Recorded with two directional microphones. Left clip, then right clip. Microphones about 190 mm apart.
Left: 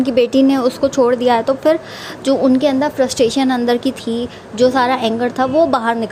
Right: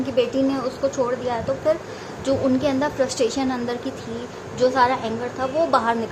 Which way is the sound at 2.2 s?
35° left (ahead or behind).